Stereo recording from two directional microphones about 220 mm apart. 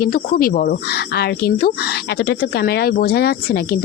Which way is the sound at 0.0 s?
40° left (ahead or behind).